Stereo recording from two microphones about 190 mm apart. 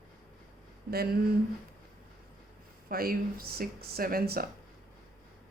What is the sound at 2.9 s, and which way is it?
Speech, 50° right (ahead or behind).